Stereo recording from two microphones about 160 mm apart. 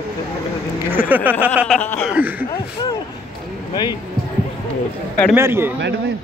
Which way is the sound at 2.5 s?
25° left (ahead or behind).